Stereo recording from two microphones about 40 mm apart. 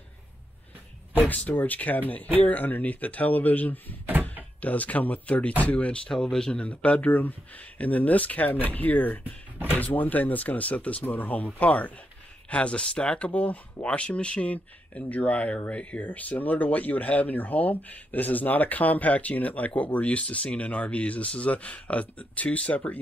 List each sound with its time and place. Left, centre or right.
1.3 s speech: left
6.1 s speech: centre
6.6 s speech: left
7.1 s speech: left
16.1 s speech: left